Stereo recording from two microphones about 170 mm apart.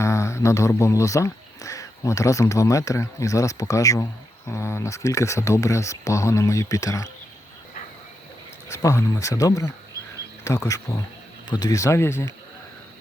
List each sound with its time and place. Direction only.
0.0 s speech: 15° left (ahead or behind)
8.7 s speech: 20° left (ahead or behind)